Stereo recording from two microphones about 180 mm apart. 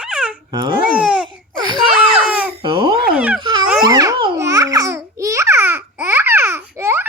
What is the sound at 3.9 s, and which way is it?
Babbling, 20° right (ahead or behind).